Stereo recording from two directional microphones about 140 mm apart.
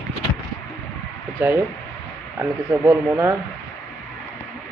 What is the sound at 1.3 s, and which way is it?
Speech, 15° right (ahead or behind).